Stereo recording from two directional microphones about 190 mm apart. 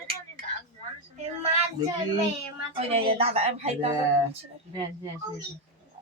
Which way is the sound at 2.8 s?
30° right (ahead or behind).